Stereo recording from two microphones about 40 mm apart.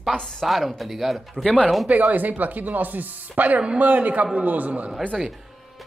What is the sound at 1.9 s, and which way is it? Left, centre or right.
A woman's voice, right.